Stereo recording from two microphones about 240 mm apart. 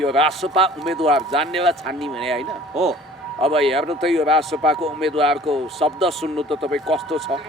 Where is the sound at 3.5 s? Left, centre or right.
Centre.